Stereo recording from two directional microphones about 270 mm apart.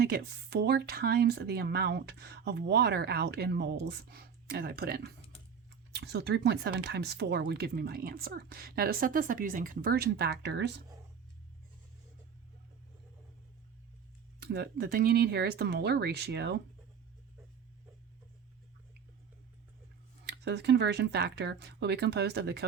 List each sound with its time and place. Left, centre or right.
0.0 s speech: right
14.3 s speech: right
20.2 s speech: right